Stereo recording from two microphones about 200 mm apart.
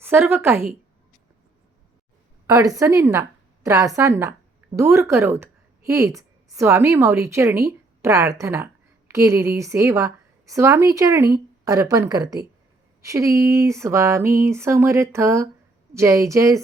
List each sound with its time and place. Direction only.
0.0 s a woman's voice: 10° right (ahead or behind)
2.5 s a woman's voice: 15° right (ahead or behind)